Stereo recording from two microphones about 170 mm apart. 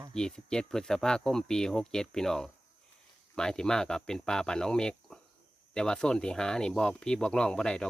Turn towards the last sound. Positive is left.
turn(degrees=5)  # may be behind; listen again after turning